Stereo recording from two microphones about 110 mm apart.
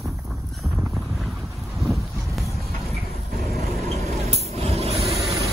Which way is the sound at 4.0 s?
75° right (ahead or behind).